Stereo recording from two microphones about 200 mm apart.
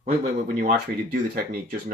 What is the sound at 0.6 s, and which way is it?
Speech, 45° right (ahead or behind).